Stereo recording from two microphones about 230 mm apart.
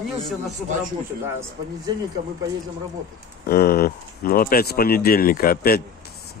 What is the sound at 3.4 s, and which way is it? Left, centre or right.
Speech, left.